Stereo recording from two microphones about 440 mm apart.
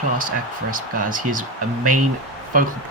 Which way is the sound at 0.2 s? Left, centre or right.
Centre.